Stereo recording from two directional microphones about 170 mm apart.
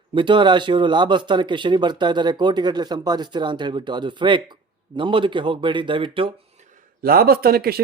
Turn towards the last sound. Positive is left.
turn(degrees=-65)  # may be behind; listen again after turning